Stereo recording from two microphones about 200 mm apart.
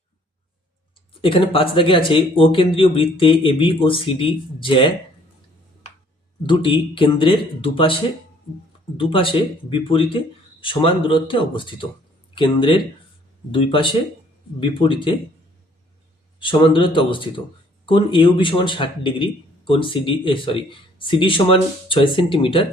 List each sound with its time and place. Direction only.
1.2 s a man's voice: 25° left (ahead or behind)
6.4 s a man's voice: 25° left (ahead or behind)
9.0 s a man's voice: 25° left (ahead or behind)
16.4 s a man's voice: 25° left (ahead or behind)